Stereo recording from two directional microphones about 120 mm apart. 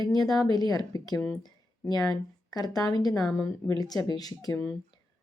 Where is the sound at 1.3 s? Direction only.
35° left (ahead or behind).